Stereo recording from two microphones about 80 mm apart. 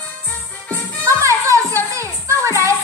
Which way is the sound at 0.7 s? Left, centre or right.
Right.